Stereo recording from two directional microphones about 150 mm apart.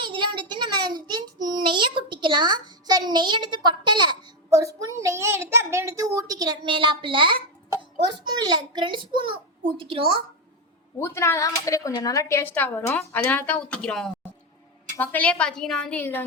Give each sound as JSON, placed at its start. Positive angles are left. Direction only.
{"t": 0.0, "sound": "child singing", "side_deg": -30}
{"t": 8.1, "sound": "a child's voice", "side_deg": -30}
{"t": 11.0, "sound": "speech", "side_deg": 15}